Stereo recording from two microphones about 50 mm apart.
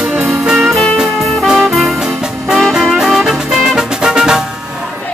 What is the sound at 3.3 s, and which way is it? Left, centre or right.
Music, centre.